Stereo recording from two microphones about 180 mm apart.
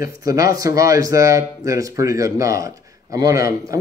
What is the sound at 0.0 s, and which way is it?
Speech, 20° right (ahead or behind).